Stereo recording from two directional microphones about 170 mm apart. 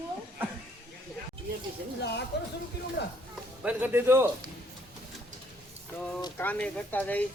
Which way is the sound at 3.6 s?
10° right (ahead or behind).